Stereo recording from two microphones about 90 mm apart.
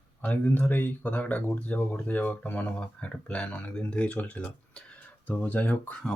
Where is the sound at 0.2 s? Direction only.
15° left (ahead or behind).